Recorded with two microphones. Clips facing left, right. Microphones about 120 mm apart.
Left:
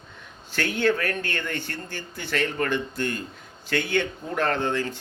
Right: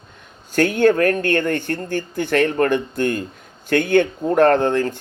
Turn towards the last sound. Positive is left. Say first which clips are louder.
# right 9 dB
turn(degrees=-50)  # may be behind; listen again after turning